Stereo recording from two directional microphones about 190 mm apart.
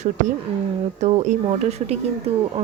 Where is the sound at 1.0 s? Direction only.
35° right (ahead or behind).